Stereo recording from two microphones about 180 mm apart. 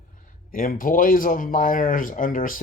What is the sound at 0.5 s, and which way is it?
Speech, 50° left (ahead or behind).